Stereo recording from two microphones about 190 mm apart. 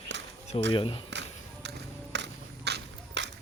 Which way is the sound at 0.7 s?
30° left (ahead or behind).